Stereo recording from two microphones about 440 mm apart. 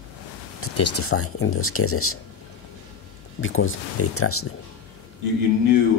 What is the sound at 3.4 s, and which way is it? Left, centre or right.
Speech, left.